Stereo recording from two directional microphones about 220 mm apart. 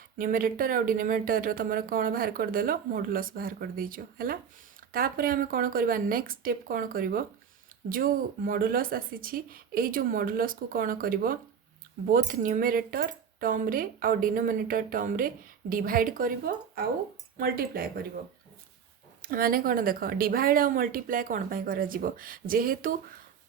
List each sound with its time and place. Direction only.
0.2 s speech: 40° right (ahead or behind)
19.2 s speech: 40° right (ahead or behind)